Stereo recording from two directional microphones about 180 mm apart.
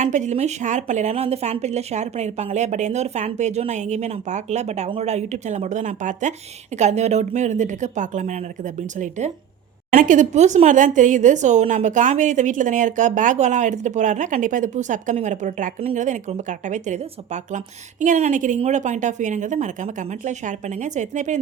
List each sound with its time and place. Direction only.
0.0 s speech: 40° right (ahead or behind)